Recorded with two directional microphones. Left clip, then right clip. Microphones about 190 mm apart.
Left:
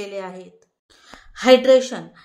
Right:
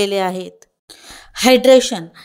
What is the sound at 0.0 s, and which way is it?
A woman's voice, 50° right (ahead or behind).